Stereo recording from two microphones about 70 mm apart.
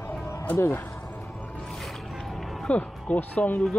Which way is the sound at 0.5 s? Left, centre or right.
Left.